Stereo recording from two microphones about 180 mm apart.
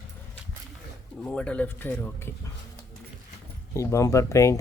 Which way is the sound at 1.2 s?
5° left (ahead or behind).